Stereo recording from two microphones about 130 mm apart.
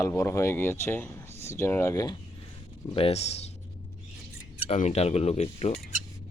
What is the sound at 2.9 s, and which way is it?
Speech, 50° left (ahead or behind).